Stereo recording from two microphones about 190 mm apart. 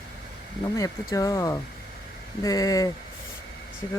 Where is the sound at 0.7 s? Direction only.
15° left (ahead or behind).